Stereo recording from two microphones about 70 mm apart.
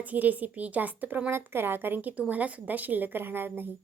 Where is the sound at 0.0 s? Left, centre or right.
Right.